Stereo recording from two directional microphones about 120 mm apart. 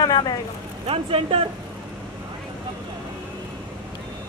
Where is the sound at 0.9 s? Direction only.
50° right (ahead or behind).